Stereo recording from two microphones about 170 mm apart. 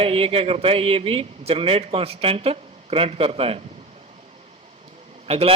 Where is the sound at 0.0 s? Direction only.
35° right (ahead or behind).